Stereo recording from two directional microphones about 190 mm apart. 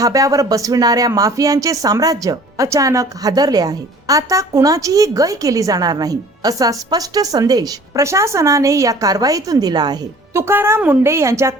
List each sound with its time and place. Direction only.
0.0 s a woman's voice: 15° right (ahead or behind)